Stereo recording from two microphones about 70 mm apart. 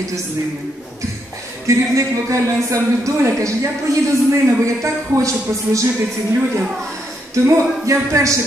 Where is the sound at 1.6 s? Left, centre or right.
Right.